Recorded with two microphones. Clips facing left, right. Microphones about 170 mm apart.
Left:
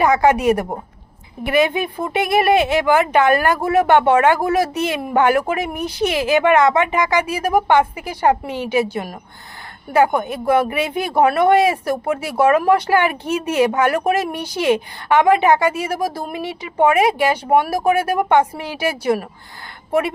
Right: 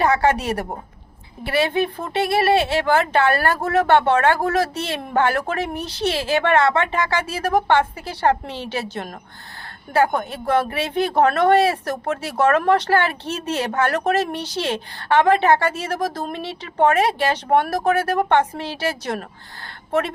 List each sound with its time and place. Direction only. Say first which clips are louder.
0.0 s speech: left 4 dB; 15° left (ahead or behind)